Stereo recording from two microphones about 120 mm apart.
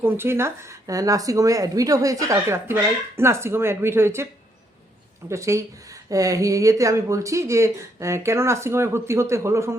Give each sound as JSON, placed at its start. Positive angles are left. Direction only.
{"t": 0.0, "sound": "speech", "side_deg": -20}
{"t": 5.3, "sound": "speech", "side_deg": -25}